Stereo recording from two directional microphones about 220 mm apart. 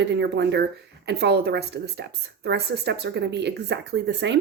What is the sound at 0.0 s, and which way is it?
Speech, 50° right (ahead or behind).